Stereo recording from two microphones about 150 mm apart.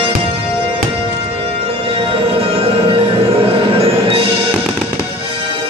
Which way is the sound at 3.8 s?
40° right (ahead or behind).